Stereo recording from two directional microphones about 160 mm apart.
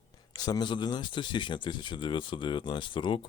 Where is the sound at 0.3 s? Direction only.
25° left (ahead or behind).